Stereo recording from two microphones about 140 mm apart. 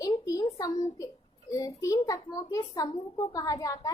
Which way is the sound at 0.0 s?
25° left (ahead or behind).